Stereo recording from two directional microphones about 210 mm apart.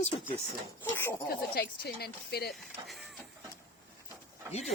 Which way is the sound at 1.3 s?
50° left (ahead or behind).